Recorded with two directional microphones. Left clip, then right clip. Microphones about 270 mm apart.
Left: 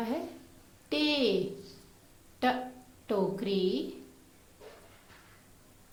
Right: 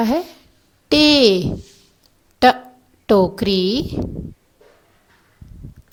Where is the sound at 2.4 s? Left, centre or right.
Right.